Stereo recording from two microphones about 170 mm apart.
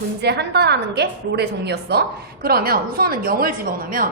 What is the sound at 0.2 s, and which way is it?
A woman's voice, 80° right.